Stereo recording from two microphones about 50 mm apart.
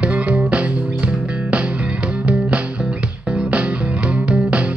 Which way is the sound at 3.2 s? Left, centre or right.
Right.